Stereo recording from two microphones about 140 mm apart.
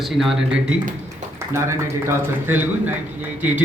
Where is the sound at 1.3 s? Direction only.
20° right (ahead or behind).